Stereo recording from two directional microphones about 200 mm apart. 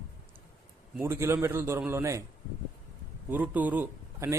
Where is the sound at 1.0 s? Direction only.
10° right (ahead or behind).